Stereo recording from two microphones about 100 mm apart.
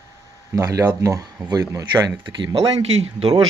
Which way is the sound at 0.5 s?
35° right (ahead or behind).